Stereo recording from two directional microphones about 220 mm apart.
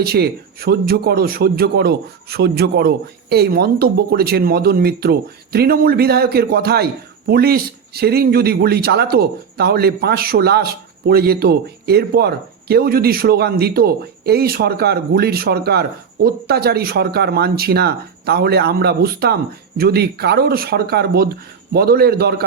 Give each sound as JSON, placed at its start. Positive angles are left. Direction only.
{"t": 0.0, "sound": "speech", "side_deg": -45}